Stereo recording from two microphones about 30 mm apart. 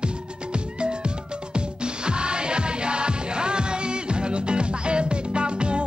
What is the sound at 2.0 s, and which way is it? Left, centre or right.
Music, right.